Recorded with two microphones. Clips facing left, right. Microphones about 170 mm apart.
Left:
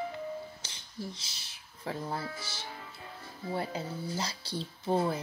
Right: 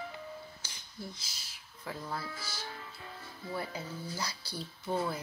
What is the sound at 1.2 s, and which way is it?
Speech, 25° left (ahead or behind).